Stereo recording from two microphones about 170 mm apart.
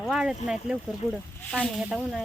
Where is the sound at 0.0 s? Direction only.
5° right (ahead or behind).